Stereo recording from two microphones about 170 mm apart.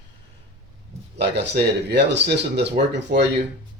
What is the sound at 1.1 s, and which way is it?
Speech, 90° right.